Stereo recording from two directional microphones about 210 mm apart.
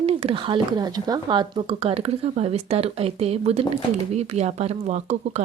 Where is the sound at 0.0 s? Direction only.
30° right (ahead or behind).